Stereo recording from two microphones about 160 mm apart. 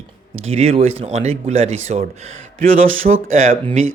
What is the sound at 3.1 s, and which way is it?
Speech, 45° right (ahead or behind).